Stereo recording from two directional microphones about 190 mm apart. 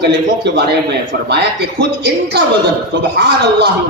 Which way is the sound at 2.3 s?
60° right (ahead or behind).